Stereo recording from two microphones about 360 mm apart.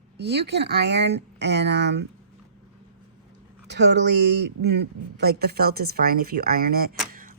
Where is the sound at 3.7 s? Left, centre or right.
Right.